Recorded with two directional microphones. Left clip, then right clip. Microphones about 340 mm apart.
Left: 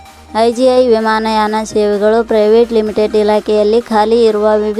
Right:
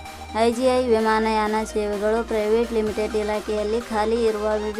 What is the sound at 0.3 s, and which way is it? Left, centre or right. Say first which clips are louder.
A woman's voice: left 10 dB; centre.